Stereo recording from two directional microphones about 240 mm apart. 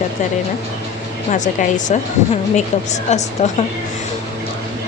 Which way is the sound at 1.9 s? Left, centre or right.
Left.